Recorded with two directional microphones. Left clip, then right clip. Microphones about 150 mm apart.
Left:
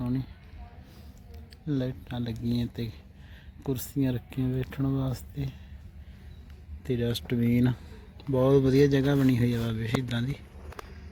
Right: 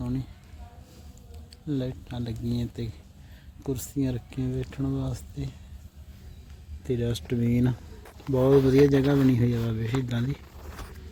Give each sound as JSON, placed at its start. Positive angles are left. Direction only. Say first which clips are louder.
{"t": 0.0, "sound": "a sound", "louder": "left 1 dB", "side_deg": 30}
{"t": 1.6, "sound": "speech", "louder": "even", "side_deg": 30}
{"t": 6.8, "sound": "speech", "louder": "even", "side_deg": 5}
{"t": 8.3, "sound": "speech", "louder": "right 2 dB", "side_deg": -10}
{"t": 8.8, "sound": "speech", "louder": "right 3 dB", "side_deg": -20}